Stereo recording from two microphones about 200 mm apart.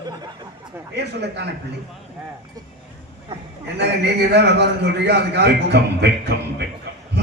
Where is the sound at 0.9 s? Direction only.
55° right (ahead or behind).